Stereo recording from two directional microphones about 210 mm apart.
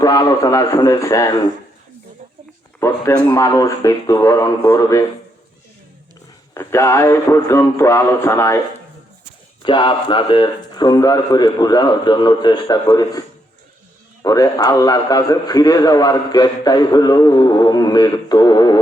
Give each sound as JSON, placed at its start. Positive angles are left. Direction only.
{"t": 0.0, "sound": "speech", "side_deg": 15}
{"t": 2.8, "sound": "speech", "side_deg": 15}
{"t": 6.5, "sound": "speech", "side_deg": 15}
{"t": 9.6, "sound": "a man's voice", "side_deg": 20}